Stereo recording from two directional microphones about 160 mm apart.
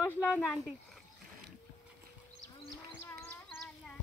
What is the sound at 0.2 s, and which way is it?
Speech, 5° right (ahead or behind).